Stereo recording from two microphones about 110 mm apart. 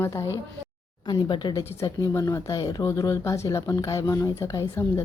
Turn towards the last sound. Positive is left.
turn(degrees=25)  # may be behind; listen again after turning